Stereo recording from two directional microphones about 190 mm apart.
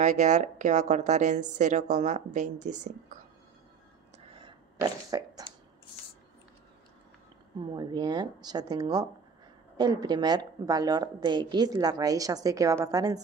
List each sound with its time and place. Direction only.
0.0 s speech: 40° right (ahead or behind)
4.5 s a sound: 20° right (ahead or behind)
7.6 s a woman's voice: 25° right (ahead or behind)